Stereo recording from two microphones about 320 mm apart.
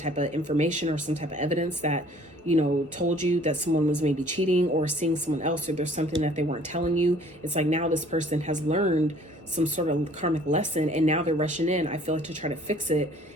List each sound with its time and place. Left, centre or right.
0.0 s speech: right
3.1 s speech: right